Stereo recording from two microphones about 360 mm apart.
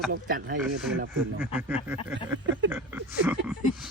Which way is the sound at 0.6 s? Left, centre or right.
Centre.